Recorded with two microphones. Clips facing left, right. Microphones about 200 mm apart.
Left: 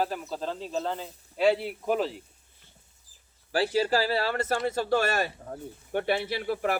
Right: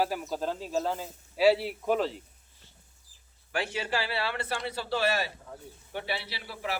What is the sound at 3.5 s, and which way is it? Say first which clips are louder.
Speech: left 7 dB; 35° left (ahead or behind).